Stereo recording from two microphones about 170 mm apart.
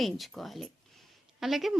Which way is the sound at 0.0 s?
Centre (ahead or behind).